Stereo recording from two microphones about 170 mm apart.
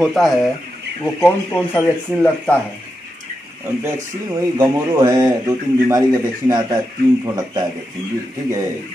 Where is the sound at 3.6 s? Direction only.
15° right (ahead or behind).